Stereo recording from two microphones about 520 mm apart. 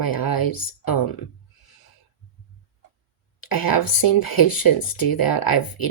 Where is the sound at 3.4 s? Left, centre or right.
Left.